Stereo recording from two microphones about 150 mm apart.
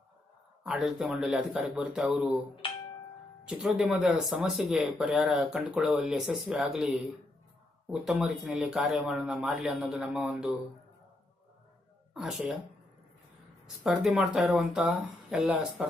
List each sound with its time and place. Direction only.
0.6 s speech: 5° right (ahead or behind)
2.6 s music: 35° left (ahead or behind)
3.4 s speech: 5° right (ahead or behind)
12.1 s speech: 5° right (ahead or behind)
13.8 s speech: centre (ahead or behind)